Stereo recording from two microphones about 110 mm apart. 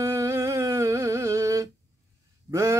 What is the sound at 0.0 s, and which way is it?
Music, 30° right (ahead or behind).